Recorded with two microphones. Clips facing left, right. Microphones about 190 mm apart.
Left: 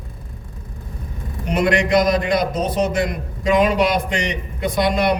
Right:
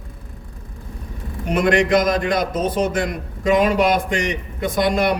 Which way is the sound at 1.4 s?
50° right (ahead or behind).